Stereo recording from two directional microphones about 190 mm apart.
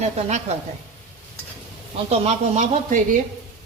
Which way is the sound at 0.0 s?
35° right (ahead or behind).